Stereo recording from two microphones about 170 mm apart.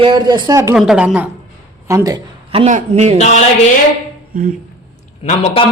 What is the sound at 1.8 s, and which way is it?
Speech, 20° right (ahead or behind).